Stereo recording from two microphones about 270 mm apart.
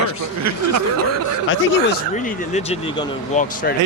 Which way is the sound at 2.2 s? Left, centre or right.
Left.